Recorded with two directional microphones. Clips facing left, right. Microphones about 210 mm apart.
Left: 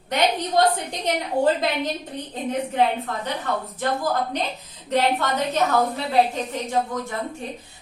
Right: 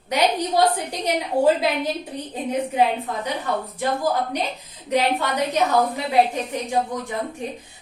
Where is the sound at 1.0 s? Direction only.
10° right (ahead or behind).